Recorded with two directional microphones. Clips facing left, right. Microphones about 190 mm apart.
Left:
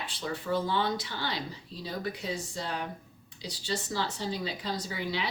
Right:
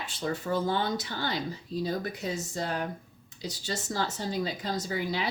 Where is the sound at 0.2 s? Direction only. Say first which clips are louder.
Right 2 dB; 45° right (ahead or behind).